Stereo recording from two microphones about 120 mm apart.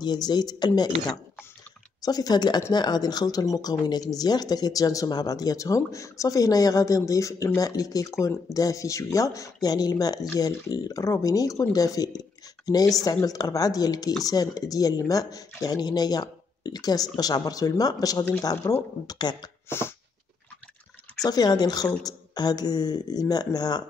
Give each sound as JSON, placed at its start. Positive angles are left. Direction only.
{"t": 0.0, "sound": "speech", "side_deg": 35}
{"t": 21.2, "sound": "speech", "side_deg": 35}